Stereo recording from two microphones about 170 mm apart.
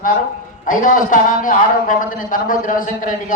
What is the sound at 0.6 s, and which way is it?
A man's voice, 50° left (ahead or behind).